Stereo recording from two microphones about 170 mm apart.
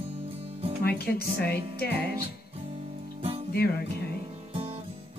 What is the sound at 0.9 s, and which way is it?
Speech, 65° left (ahead or behind).